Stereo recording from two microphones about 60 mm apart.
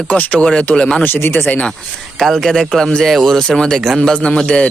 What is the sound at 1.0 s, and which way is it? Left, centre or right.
Speech, left.